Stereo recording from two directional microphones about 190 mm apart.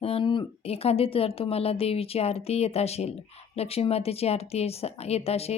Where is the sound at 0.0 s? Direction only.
30° left (ahead or behind).